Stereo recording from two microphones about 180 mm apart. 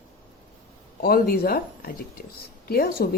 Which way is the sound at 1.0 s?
60° left (ahead or behind).